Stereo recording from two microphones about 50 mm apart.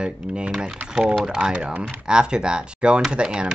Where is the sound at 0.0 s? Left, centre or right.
Centre.